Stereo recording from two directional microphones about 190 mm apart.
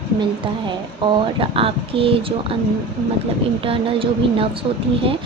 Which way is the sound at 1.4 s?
30° right (ahead or behind).